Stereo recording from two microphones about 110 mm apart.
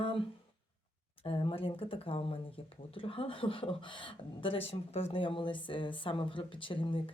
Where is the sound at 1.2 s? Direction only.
55° left (ahead or behind).